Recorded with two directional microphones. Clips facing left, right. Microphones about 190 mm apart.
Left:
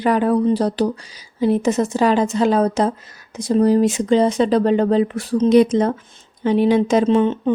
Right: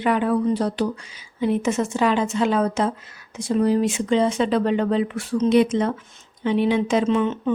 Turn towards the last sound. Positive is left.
turn(degrees=35)  # may be behind; listen again after turning